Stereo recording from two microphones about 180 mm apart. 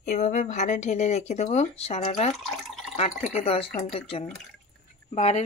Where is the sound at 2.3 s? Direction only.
Centre (ahead or behind).